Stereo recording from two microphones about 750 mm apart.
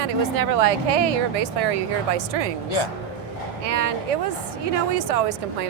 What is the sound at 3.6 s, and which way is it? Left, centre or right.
Speech, right.